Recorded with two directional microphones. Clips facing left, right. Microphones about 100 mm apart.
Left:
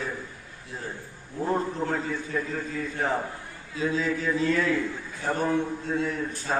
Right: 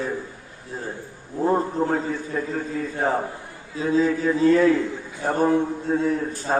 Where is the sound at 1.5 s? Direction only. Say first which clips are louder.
Right 6 dB; 35° right (ahead or behind).